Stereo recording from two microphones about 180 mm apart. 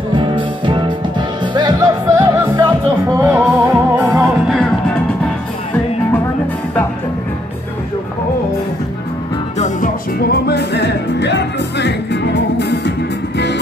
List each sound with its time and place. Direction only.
0.1 s music: 25° right (ahead or behind); by 4.3 s 10° right (ahead or behind)
4.5 s music: 5° left (ahead or behind)
9.6 s music: 50° left (ahead or behind); by 12.9 s 70° left (ahead or behind)